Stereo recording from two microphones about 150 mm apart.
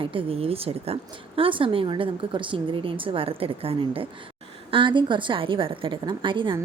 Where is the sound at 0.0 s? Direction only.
35° right (ahead or behind).